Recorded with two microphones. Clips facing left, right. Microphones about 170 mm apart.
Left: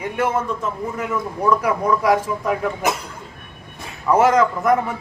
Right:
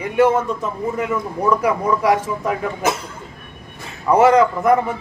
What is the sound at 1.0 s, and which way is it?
A man's voice, 10° right (ahead or behind).